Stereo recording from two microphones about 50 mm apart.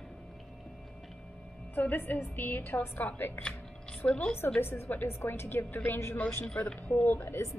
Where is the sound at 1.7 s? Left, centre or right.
Left.